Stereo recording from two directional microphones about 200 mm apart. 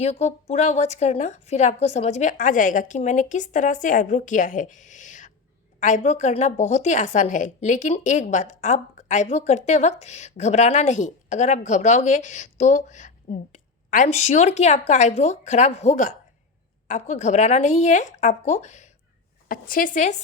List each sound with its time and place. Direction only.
0.0 s a woman's voice: 30° left (ahead or behind)